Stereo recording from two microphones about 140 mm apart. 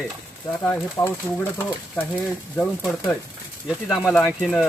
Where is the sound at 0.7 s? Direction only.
15° left (ahead or behind).